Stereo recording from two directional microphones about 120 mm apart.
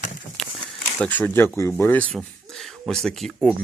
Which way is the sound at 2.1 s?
Centre (ahead or behind).